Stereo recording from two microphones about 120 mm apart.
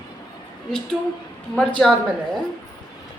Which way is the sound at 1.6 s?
10° left (ahead or behind).